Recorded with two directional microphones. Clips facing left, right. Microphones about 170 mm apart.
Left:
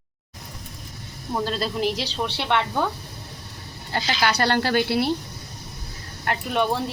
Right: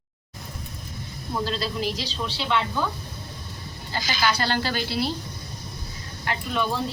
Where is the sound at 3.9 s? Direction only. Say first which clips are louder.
Left 2 dB; 65° left (ahead or behind).